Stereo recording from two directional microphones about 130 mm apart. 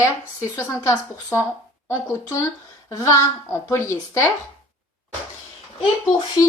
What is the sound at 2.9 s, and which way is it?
A woman's voice, 20° left (ahead or behind).